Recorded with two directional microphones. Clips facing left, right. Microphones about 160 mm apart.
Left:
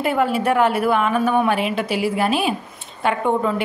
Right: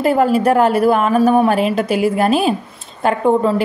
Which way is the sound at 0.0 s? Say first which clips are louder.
Right 6 dB; 40° right (ahead or behind).